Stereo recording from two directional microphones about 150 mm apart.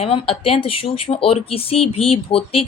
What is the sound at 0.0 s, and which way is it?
A woman's voice, 40° left (ahead or behind).